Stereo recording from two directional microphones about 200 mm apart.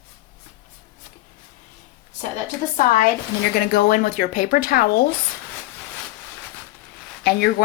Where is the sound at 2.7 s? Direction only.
45° left (ahead or behind).